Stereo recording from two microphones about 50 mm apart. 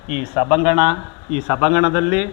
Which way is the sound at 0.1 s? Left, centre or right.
Centre.